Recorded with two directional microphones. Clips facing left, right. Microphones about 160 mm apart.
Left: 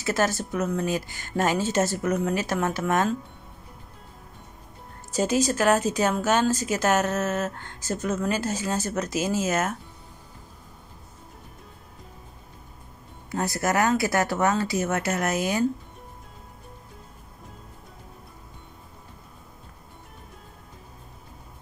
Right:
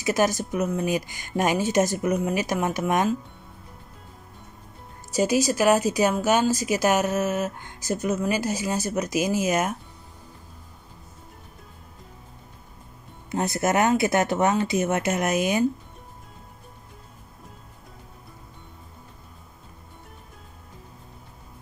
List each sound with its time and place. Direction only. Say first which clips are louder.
0.0 s speech: right 2 dB; 15° right (ahead or behind)
5.1 s speech: right 1 dB; 10° right (ahead or behind)
13.3 s speech: right 2 dB; 20° right (ahead or behind)